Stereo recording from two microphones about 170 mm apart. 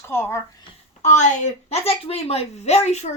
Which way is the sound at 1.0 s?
45° left (ahead or behind).